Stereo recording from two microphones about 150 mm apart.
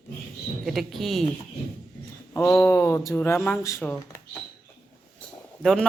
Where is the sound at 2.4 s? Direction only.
5° left (ahead or behind).